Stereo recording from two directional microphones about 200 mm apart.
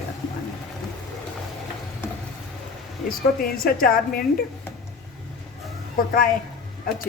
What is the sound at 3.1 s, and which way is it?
A woman's voice, 45° left (ahead or behind).